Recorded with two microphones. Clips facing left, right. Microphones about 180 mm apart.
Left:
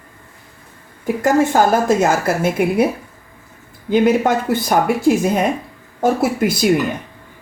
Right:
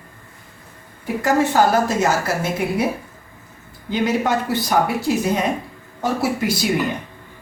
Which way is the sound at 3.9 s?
55° left (ahead or behind).